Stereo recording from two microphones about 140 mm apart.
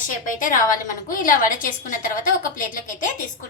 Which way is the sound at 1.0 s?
75° left (ahead or behind).